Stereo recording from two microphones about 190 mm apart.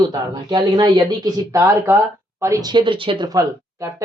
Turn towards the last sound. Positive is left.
turn(degrees=-15)  # may be behind; listen again after turning